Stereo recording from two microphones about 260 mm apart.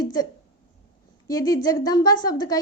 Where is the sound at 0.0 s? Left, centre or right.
Centre.